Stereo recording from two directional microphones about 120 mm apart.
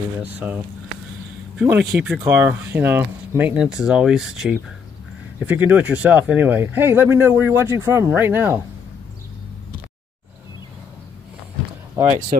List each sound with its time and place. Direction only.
0.2 s speech: 10° right (ahead or behind)
1.6 s speech: 15° right (ahead or behind)
12.0 s speech: 20° right (ahead or behind)